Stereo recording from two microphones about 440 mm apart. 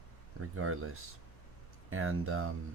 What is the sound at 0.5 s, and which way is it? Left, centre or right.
Speech, right.